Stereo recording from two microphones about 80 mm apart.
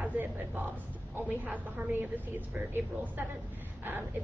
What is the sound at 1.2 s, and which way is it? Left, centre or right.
Speech, right.